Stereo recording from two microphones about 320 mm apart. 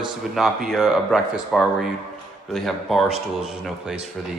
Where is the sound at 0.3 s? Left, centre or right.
Centre.